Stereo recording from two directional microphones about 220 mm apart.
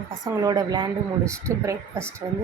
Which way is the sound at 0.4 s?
20° right (ahead or behind).